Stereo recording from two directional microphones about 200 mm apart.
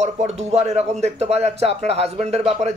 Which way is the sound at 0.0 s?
35° right (ahead or behind).